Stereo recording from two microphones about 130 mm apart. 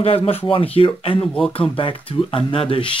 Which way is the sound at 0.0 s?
50° left (ahead or behind).